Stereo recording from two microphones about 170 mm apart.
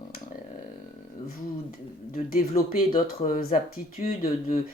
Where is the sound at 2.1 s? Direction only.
55° left (ahead or behind).